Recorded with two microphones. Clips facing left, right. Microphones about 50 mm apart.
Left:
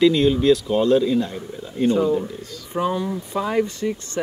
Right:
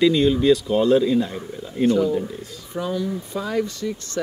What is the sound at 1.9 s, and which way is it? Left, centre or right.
Speech, left.